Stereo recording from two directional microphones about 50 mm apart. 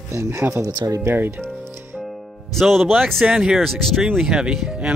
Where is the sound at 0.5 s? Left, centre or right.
Right.